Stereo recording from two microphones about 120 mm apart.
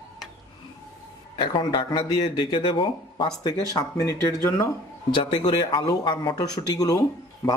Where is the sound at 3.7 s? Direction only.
30° left (ahead or behind).